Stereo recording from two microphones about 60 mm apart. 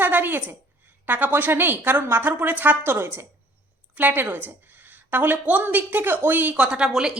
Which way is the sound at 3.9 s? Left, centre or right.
Right.